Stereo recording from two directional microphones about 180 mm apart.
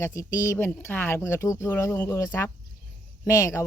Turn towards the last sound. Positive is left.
turn(degrees=15)  # may be behind; listen again after turning